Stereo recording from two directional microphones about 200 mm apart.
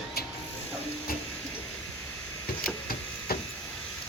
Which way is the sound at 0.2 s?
50° left (ahead or behind).